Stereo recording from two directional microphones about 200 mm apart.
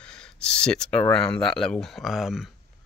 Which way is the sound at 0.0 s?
5° left (ahead or behind).